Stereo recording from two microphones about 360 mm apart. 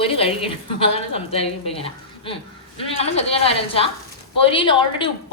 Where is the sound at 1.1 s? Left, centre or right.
Centre.